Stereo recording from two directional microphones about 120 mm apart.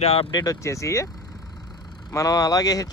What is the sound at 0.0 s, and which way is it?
Speech, 55° left (ahead or behind).